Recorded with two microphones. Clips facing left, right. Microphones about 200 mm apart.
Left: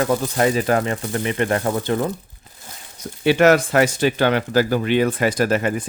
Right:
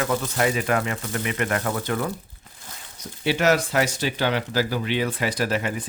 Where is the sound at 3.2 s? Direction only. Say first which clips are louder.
Left 6 dB; 55° left (ahead or behind).